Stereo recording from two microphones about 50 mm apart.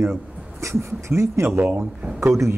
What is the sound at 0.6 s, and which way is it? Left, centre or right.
A man's voice, right.